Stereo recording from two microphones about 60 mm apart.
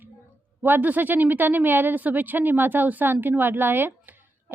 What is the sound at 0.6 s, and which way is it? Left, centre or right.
A woman's voice, right.